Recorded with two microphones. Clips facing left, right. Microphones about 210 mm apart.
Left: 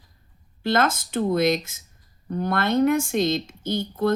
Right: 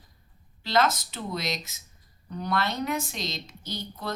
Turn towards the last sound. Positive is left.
turn(degrees=50)  # may be behind; listen again after turning